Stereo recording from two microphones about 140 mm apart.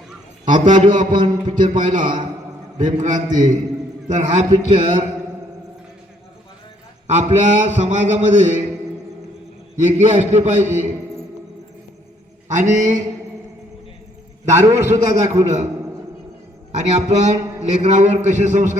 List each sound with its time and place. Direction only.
0.5 s a man's voice: 35° right (ahead or behind)
1.7 s a man's voice: 65° right (ahead or behind)
7.1 s a man's voice: 55° right (ahead or behind)
9.8 s a man's voice: 55° right (ahead or behind)
12.5 s a man's voice: 60° right (ahead or behind)
14.4 s a man's voice: 55° right (ahead or behind)
14.7 s a man's voice: 20° right (ahead or behind)
15.1 s a man's voice: 55° right (ahead or behind)
16.7 s a man's voice: 55° right (ahead or behind)